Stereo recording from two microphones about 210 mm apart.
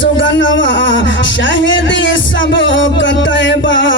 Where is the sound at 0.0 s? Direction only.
60° left (ahead or behind).